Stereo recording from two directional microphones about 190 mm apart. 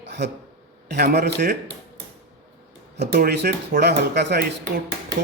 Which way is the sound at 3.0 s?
55° right (ahead or behind).